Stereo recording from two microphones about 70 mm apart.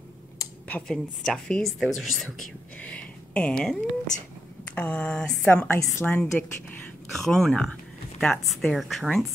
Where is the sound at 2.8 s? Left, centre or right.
Centre.